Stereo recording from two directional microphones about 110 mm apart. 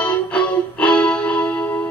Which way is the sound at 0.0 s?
15° left (ahead or behind).